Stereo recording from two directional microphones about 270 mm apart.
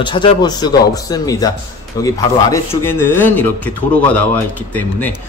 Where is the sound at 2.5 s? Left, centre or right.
Centre.